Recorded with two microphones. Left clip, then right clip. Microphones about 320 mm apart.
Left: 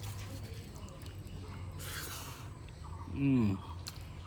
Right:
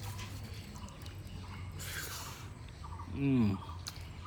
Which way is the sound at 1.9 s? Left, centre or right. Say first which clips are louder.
Right 1 dB; centre.